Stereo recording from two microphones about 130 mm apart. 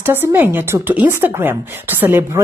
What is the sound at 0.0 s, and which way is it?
Speech, 15° right (ahead or behind).